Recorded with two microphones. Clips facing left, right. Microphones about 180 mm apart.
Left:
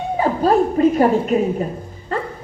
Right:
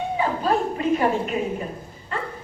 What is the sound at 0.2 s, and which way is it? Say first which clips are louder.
Dog: left 8 dB; 40° left (ahead or behind).